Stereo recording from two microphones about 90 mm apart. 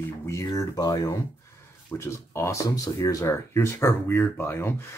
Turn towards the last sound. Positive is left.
turn(degrees=25)  # may be behind; listen again after turning